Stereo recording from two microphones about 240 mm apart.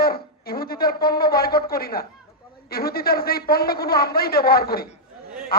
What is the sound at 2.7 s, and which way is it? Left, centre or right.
A man's voice, left.